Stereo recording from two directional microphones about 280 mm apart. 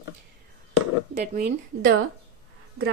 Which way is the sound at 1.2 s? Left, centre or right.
Right.